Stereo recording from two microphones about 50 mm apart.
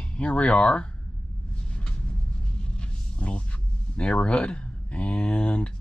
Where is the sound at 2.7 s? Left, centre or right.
Left.